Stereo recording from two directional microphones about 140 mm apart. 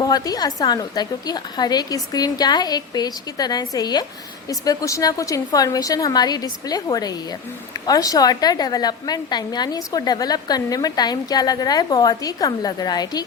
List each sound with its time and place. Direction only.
0.0 s a woman's voice: 30° left (ahead or behind)